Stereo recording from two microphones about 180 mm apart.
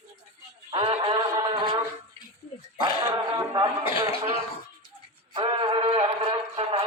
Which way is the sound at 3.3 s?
20° right (ahead or behind).